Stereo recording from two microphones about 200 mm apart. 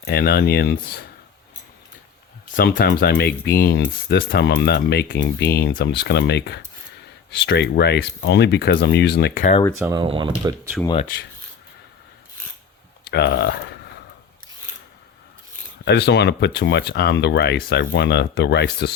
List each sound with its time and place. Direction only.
0.0 s speech: 55° left (ahead or behind)
2.5 s speech: 45° left (ahead or behind)
9.7 s speech: 10° right (ahead or behind)
10.0 s speech: 25° right (ahead or behind)
10.7 s speech: centre (ahead or behind)
13.1 s speech: 55° left (ahead or behind)
15.8 s speech: 60° left (ahead or behind)